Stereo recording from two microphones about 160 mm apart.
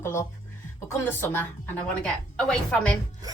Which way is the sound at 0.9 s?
15° left (ahead or behind).